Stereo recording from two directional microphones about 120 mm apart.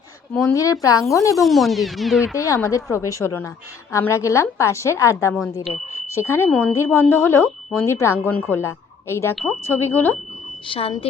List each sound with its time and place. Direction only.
0.5 s speech: 30° left (ahead or behind)
1.4 s music: centre (ahead or behind)
2.3 s speech: 25° left (ahead or behind)
10.7 s speech: 50° left (ahead or behind)